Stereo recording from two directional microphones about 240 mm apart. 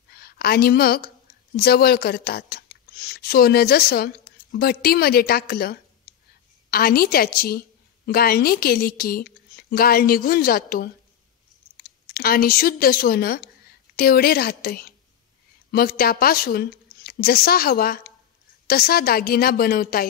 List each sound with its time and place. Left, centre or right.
0.1 s a woman's voice: left